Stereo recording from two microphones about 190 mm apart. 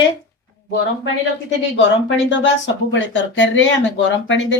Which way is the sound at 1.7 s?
75° left (ahead or behind).